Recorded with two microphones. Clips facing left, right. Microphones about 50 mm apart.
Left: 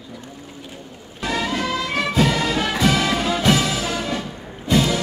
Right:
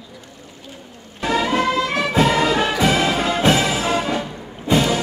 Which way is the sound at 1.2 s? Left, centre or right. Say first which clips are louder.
Right 5 dB; right.